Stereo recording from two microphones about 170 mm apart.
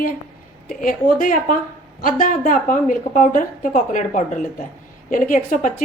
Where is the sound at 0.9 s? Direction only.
55° left (ahead or behind).